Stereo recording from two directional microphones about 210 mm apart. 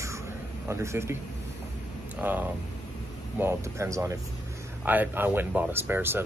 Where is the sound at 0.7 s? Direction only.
10° right (ahead or behind).